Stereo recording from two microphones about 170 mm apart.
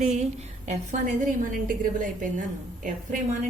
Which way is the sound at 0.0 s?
40° right (ahead or behind).